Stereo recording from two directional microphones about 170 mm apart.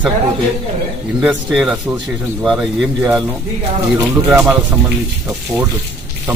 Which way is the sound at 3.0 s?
20° right (ahead or behind).